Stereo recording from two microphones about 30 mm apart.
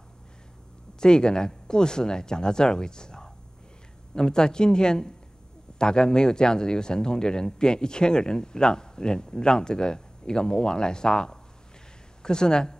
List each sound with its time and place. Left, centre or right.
1.0 s speech: left